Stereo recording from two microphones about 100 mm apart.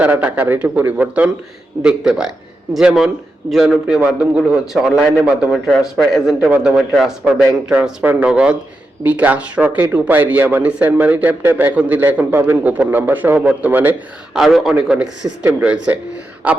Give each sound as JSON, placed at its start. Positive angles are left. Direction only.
{"t": 0.0, "sound": "a man's voice", "side_deg": -15}
{"t": 14.3, "sound": "a man's voice", "side_deg": 0}
{"t": 14.8, "sound": "a man's voice", "side_deg": -10}
{"t": 15.2, "sound": "speech", "side_deg": -25}
{"t": 15.6, "sound": "a man's voice", "side_deg": -15}